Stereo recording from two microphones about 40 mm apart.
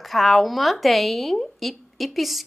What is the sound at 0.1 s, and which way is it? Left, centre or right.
A woman's voice, centre.